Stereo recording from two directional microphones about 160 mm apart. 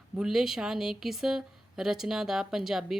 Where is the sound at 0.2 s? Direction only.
5° right (ahead or behind).